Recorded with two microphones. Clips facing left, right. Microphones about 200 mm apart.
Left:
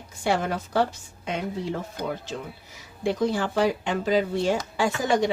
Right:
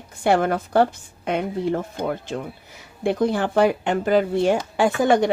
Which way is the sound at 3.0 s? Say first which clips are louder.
Right 4 dB; 55° right (ahead or behind).